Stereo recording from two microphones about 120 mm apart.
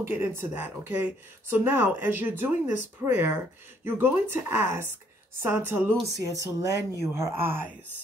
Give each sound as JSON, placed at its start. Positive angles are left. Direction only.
{"t": 0.0, "sound": "speech", "side_deg": -20}